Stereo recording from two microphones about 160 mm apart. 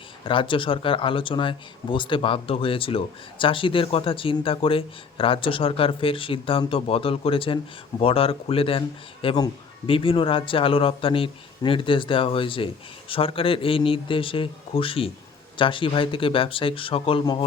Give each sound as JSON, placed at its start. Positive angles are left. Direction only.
{"t": 0.3, "sound": "speech", "side_deg": 30}